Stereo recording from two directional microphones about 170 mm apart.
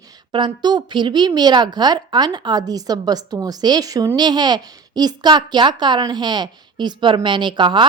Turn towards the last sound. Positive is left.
turn(degrees=-25)  # may be behind; listen again after turning